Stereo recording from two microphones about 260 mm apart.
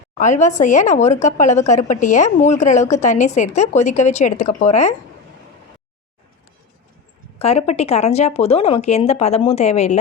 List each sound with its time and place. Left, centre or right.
0.2 s speech: left
7.3 s speech: left